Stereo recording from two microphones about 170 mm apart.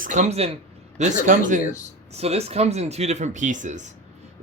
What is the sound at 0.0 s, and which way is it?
Speech, 45° right (ahead or behind).